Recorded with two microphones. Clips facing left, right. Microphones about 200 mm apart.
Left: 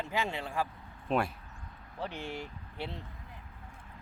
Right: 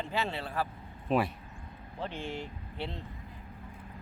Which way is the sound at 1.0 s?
Centre (ahead or behind).